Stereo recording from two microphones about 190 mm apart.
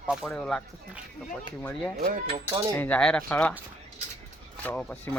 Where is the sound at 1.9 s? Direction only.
50° right (ahead or behind).